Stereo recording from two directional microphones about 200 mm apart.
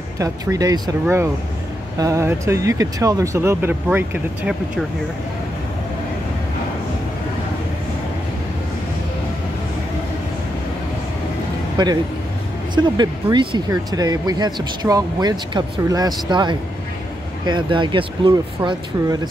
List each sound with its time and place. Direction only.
0.2 s speech: 15° right (ahead or behind)
11.8 s speech: 20° right (ahead or behind)